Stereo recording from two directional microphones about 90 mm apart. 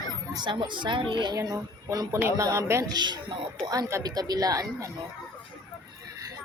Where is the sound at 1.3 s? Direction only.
40° right (ahead or behind).